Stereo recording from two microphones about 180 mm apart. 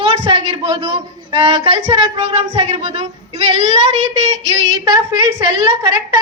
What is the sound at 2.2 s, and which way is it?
Speech, 35° right (ahead or behind).